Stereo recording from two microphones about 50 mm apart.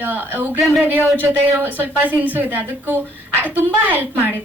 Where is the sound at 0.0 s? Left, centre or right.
Right.